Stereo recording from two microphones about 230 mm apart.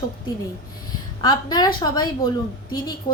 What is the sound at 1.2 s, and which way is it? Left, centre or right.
A woman's voice, centre.